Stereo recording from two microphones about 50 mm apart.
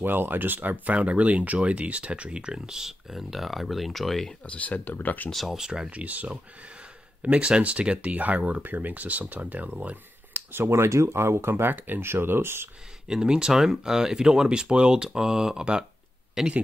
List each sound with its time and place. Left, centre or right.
0.0 s speech: right; by 4.3 s centre
4.5 s speech: left
5.3 s speech: centre
5.6 s speech: centre
5.9 s speech: right
9.8 s a sound: right
10.7 s speech: right
13.1 s speech: centre
16.4 s speech: centre